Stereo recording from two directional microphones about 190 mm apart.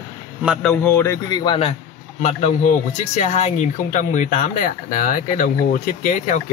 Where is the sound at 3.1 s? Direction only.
40° left (ahead or behind).